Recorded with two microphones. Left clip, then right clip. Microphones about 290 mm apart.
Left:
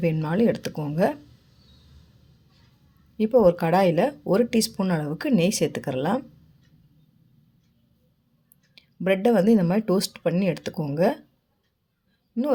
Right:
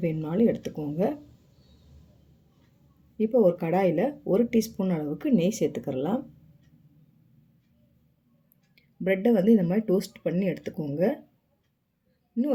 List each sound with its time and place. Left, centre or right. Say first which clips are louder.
0.3 s speech: even; left
3.2 s speech: left 4 dB; left
8.7 s a sound: left 3 dB; left
9.5 s speech: left 2 dB; left
12.4 s speech: left 3 dB; left